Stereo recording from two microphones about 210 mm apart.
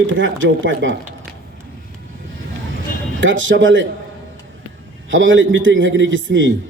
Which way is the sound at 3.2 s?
65° right (ahead or behind).